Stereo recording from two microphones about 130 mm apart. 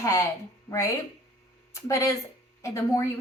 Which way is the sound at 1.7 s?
25° left (ahead or behind).